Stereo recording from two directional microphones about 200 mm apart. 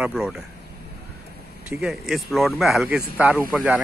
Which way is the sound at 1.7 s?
5° right (ahead or behind).